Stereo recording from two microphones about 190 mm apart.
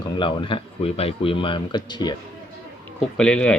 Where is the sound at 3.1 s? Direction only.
5° left (ahead or behind).